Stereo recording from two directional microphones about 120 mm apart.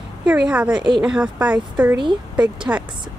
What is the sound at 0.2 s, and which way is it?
Speech, 10° right (ahead or behind).